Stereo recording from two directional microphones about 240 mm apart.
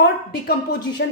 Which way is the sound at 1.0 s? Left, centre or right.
Left.